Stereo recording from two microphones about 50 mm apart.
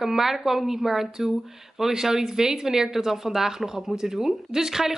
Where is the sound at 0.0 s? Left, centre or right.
Centre.